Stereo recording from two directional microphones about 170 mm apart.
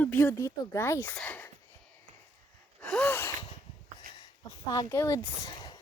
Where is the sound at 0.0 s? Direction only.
10° left (ahead or behind).